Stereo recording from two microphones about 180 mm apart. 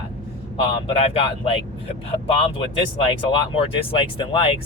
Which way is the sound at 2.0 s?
35° left (ahead or behind).